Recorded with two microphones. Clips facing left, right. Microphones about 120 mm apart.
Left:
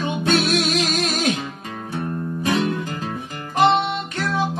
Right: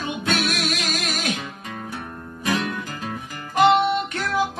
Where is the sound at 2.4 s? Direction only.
30° left (ahead or behind).